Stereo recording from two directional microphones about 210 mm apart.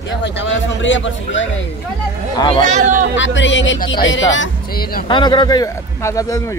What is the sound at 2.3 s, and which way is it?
Speech, 20° left (ahead or behind).